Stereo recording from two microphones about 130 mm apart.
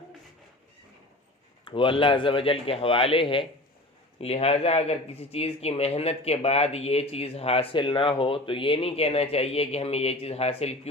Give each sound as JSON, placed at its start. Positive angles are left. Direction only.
{"t": 1.6, "sound": "speech", "side_deg": 40}